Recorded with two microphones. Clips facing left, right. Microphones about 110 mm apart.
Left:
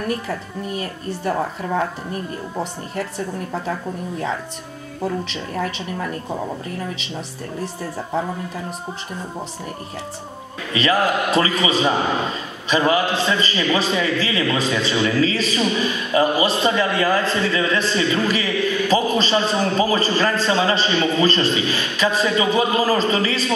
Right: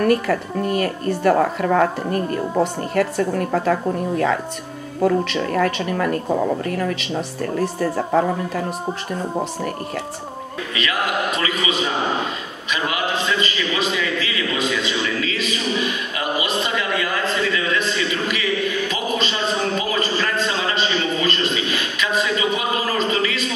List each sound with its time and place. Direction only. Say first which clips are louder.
0.0 s speech: right 7 dB; 65° right (ahead or behind)
5.0 s speech: right 7 dB; 60° right (ahead or behind)
10.7 s a man's voice: left 5 dB; 35° left (ahead or behind)